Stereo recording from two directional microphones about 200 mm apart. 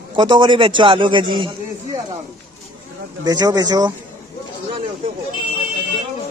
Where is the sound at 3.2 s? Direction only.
20° right (ahead or behind).